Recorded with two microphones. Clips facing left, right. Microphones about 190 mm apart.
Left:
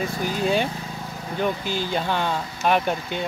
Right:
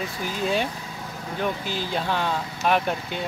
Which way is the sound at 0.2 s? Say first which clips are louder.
Left 2 dB; centre (ahead or behind).